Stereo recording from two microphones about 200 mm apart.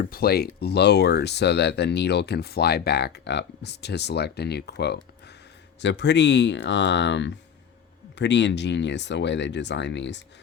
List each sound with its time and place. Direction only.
0.0 s speech: 50° left (ahead or behind)